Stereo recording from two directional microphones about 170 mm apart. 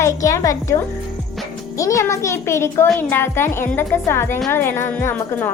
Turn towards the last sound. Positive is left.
turn(degrees=10)  # may be behind; listen again after turning